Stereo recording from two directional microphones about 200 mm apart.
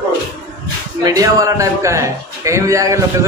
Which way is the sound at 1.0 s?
15° right (ahead or behind).